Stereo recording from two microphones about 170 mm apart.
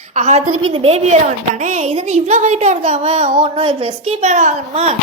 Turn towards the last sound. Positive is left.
turn(degrees=-40)  # may be behind; listen again after turning